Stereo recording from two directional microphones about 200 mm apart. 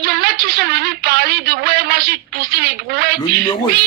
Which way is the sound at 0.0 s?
50° right (ahead or behind).